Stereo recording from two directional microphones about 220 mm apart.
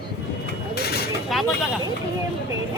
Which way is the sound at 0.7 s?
45° left (ahead or behind).